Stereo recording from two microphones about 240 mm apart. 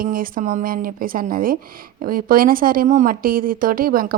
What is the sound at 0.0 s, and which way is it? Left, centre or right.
Speech, right.